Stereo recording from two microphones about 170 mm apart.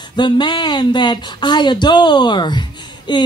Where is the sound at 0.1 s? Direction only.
25° left (ahead or behind).